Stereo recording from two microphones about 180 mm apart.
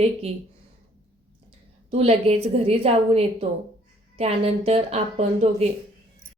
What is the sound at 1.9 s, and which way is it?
A woman's voice, 35° right (ahead or behind).